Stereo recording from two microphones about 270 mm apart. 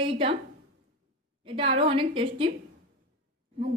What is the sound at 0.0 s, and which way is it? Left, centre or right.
Speech, centre.